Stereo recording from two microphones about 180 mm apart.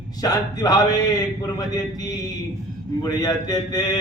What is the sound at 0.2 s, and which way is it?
Mantra, 20° left (ahead or behind).